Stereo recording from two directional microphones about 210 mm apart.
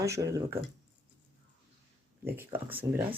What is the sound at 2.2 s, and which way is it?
Speech, 10° right (ahead or behind).